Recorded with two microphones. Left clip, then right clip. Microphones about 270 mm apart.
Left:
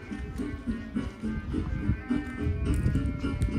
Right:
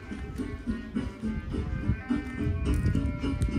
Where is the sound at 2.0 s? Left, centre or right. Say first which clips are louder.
Right 1 dB; right.